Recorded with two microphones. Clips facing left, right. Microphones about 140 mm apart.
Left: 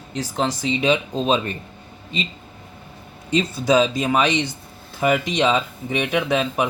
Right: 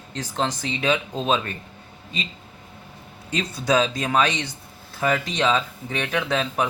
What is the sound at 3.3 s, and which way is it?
Speech, 10° left (ahead or behind).